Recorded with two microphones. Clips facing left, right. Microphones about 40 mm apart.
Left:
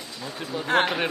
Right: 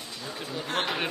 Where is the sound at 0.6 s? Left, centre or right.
Left.